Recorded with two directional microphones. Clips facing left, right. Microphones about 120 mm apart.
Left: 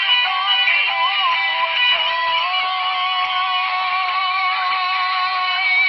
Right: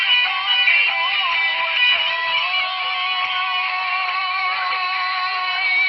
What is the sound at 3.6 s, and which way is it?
Music, 5° left (ahead or behind).